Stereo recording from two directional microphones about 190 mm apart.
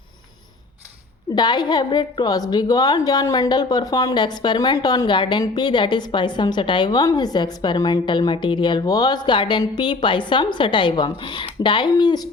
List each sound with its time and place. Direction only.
1.4 s a woman's voice: 25° left (ahead or behind)